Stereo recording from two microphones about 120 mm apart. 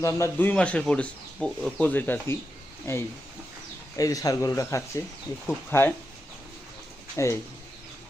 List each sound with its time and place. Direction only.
0.0 s speech: 20° left (ahead or behind); by 1.9 s 5° left (ahead or behind)
1.9 s speech: 15° left (ahead or behind)
7.2 s speech: 25° left (ahead or behind)